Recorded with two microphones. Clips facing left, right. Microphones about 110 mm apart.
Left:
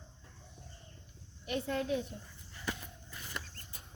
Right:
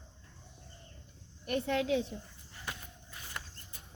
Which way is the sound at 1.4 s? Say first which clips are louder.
Right 3 dB; 60° right (ahead or behind).